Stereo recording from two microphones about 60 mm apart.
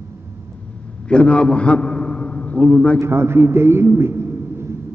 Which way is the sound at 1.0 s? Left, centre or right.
Centre.